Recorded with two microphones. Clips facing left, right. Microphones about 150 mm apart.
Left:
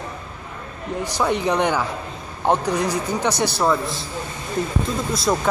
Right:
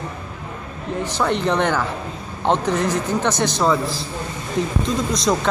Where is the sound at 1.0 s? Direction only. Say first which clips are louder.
Right 1 dB; 10° left (ahead or behind).